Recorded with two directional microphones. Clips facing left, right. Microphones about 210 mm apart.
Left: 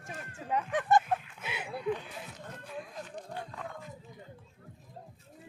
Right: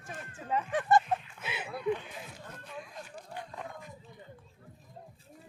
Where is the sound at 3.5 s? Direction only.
15° right (ahead or behind).